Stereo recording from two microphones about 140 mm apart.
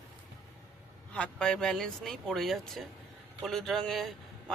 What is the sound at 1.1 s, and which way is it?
Speech, 5° left (ahead or behind).